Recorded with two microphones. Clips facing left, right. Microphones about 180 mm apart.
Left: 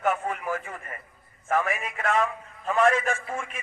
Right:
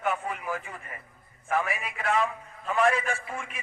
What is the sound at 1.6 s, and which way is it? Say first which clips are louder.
Speech: left 3 dB; 35° left (ahead or behind).